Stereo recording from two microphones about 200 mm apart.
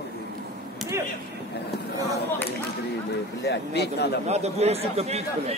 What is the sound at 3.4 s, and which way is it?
Speech, 55° left (ahead or behind).